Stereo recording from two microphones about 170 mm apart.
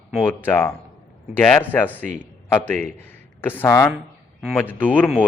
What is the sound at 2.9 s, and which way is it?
A man's voice, 10° left (ahead or behind).